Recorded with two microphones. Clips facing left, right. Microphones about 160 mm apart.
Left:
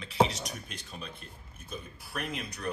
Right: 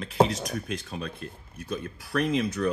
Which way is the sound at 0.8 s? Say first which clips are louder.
Right 8 dB; 65° right (ahead or behind).